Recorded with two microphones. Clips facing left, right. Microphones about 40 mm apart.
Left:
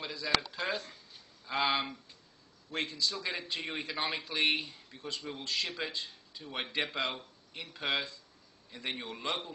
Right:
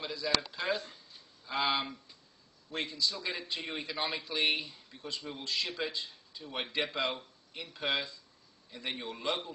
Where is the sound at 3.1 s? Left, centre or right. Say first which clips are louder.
Left 1 dB; centre; by 5.7 s left.